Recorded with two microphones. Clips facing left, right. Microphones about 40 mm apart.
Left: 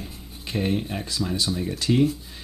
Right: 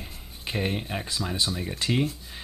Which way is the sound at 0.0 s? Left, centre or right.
Centre.